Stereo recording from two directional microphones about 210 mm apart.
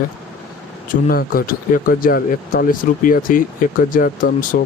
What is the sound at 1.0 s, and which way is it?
Speech, 45° left (ahead or behind).